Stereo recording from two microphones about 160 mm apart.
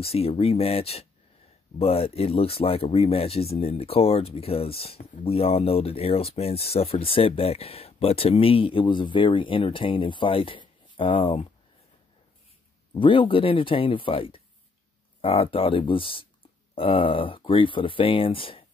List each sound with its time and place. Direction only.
0.0 s speech: 40° left (ahead or behind)
12.9 s speech: 30° left (ahead or behind)